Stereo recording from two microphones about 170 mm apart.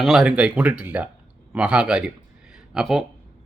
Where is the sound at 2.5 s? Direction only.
5° right (ahead or behind).